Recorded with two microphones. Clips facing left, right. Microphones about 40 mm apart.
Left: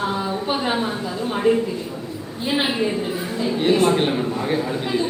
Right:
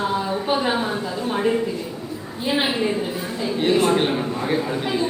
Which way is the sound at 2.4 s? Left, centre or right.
Centre.